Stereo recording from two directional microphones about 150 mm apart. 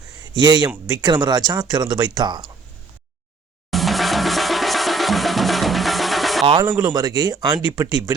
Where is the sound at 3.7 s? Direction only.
Centre (ahead or behind).